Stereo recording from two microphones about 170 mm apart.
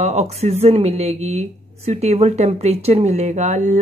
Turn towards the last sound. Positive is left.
turn(degrees=-45)  # may be behind; listen again after turning